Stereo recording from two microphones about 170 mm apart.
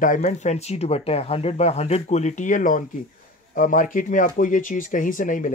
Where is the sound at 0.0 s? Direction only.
50° left (ahead or behind).